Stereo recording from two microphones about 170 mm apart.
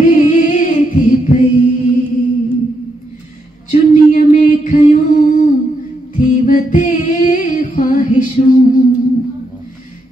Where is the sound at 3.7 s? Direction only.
45° left (ahead or behind).